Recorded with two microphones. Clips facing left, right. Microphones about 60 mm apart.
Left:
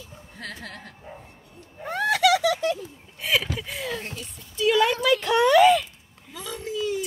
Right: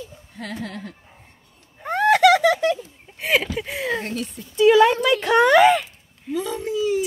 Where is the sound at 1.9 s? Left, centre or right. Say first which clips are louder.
Right 6 dB; right.